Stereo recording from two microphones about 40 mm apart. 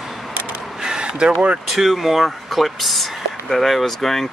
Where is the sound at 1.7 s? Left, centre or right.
Centre.